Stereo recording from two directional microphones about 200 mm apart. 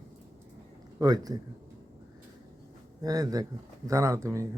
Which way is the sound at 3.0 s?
15° right (ahead or behind).